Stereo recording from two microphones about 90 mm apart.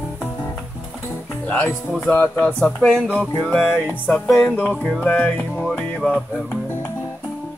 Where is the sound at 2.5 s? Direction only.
5° left (ahead or behind).